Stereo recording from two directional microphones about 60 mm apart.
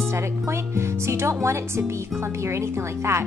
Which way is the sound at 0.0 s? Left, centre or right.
Right.